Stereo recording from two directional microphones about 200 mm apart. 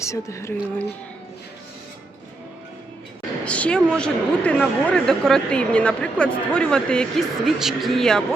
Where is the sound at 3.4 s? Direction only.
5° left (ahead or behind).